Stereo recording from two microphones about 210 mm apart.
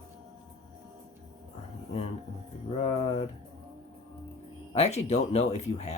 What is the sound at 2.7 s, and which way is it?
Speech, 30° left (ahead or behind).